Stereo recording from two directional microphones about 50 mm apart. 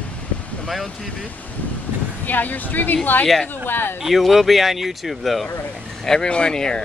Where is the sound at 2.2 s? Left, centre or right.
Left.